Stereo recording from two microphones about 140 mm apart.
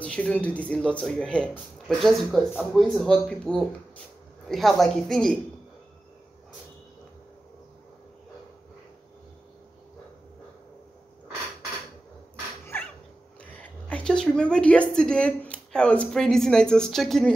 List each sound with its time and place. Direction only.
0.0 s speech: 10° left (ahead or behind)
13.4 s a woman's voice: 10° left (ahead or behind)